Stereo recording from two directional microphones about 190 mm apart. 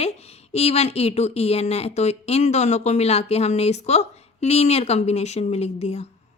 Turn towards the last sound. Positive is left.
turn(degrees=35)  # may be behind; listen again after turning